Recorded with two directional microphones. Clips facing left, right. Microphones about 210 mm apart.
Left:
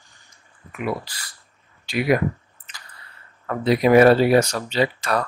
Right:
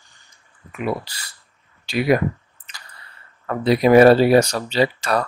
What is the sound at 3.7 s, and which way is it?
Speech, 35° right (ahead or behind).